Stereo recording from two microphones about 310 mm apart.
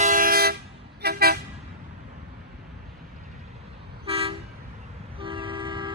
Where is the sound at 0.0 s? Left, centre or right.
Right.